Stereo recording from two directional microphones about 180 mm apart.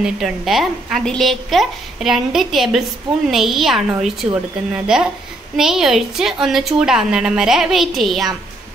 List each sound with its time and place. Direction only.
0.0 s a woman's voice: centre (ahead or behind)